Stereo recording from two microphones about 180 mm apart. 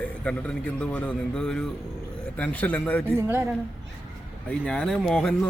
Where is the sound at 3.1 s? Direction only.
10° right (ahead or behind).